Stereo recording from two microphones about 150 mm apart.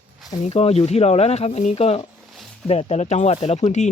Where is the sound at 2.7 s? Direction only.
45° left (ahead or behind).